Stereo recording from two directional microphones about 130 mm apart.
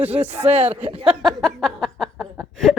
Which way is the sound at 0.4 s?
55° right (ahead or behind).